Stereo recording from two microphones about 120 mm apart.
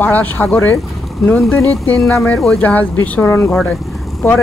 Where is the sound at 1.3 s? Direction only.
5° left (ahead or behind).